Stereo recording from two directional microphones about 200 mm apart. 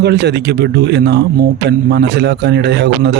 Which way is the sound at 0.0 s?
55° right (ahead or behind).